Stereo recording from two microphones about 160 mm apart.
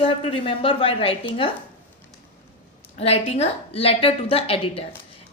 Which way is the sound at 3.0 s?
40° left (ahead or behind).